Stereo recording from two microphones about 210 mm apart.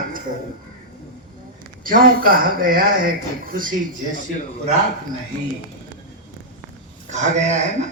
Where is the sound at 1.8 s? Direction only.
40° right (ahead or behind).